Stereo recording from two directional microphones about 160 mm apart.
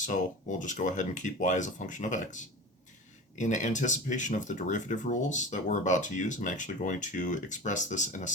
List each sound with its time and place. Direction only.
0.6 s speech: 50° left (ahead or behind)